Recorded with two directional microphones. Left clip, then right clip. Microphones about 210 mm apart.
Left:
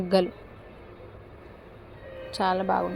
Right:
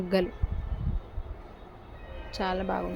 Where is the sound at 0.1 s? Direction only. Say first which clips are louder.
Left 4 dB; centre (ahead or behind).